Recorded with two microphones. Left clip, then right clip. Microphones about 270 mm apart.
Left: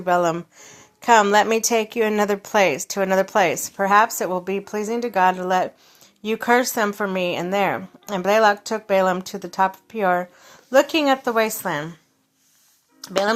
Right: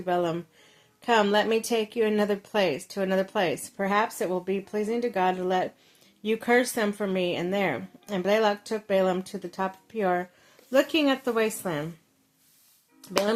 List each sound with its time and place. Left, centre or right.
0.0 s speech: centre